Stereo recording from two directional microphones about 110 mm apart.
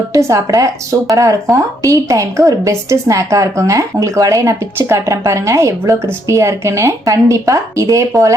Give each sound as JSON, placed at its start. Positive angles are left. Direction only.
{"t": 0.1, "sound": "a woman's voice", "side_deg": -30}